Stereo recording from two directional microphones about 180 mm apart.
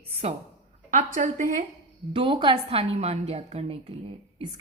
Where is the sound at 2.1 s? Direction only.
30° right (ahead or behind).